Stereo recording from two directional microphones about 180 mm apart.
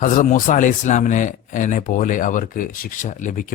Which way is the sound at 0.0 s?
45° left (ahead or behind).